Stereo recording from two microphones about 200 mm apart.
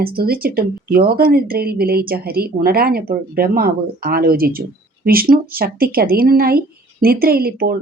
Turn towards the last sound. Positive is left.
turn(degrees=-50)  # may be behind; listen again after turning